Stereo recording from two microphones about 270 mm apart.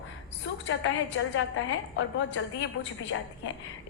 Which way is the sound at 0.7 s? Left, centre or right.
Left.